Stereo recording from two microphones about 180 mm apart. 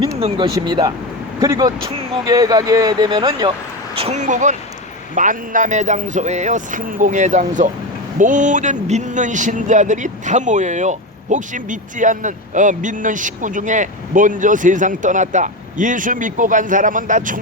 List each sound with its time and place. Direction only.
0.2 s speech: 30° right (ahead or behind)
3.9 s speech: 35° right (ahead or behind)